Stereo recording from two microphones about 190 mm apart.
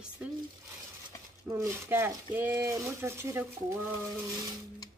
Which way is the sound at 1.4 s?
15° right (ahead or behind).